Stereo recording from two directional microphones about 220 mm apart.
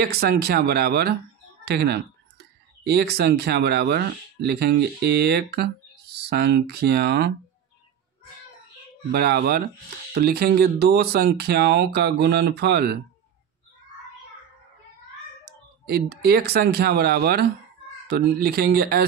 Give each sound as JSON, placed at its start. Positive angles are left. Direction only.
{"t": 0.0, "sound": "speech", "side_deg": -45}
{"t": 9.1, "sound": "speech", "side_deg": -45}
{"t": 15.9, "sound": "speech", "side_deg": -45}